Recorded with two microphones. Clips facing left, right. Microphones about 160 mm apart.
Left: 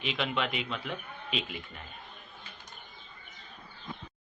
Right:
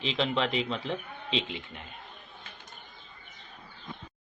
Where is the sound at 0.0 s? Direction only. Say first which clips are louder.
Right 3 dB; 30° right (ahead or behind).